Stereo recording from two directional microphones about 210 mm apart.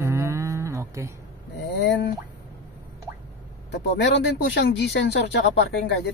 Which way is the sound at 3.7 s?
55° left (ahead or behind).